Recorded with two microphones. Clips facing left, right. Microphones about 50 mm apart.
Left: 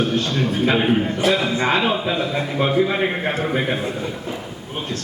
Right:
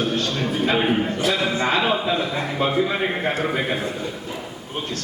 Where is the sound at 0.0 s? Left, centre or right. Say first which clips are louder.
Left 2 dB; left.